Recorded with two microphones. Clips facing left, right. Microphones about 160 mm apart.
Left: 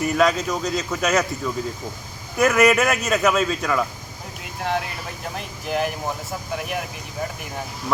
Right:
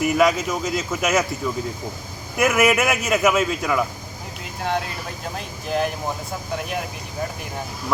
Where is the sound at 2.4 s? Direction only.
5° right (ahead or behind).